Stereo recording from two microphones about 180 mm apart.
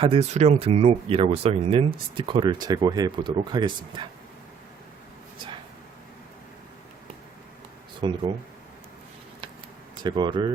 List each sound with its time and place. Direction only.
0.0 s speech: 30° right (ahead or behind)
8.0 s speech: 25° right (ahead or behind)
9.9 s speech: 25° right (ahead or behind)